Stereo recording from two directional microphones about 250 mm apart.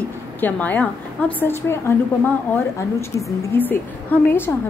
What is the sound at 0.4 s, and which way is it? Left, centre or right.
A woman's voice, centre.